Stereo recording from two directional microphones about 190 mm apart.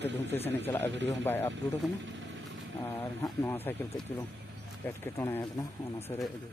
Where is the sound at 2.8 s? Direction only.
10° left (ahead or behind).